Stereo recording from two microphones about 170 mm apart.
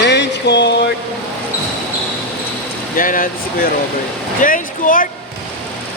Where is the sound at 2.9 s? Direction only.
55° left (ahead or behind).